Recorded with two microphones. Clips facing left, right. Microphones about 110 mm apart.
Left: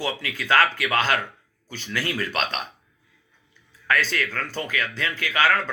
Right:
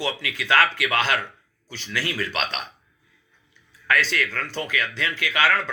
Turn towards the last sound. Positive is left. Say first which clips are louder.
# even
turn(degrees=45)  # may be behind; listen again after turning